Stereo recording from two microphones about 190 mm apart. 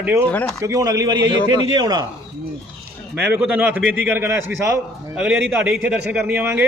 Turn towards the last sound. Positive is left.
turn(degrees=-10)  # may be behind; listen again after turning